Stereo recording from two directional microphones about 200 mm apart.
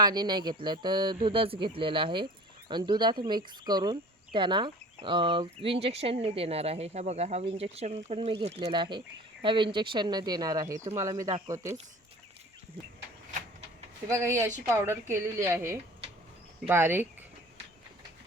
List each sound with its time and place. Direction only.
0.0 s speech: 20° right (ahead or behind)
14.1 s speech: 15° right (ahead or behind)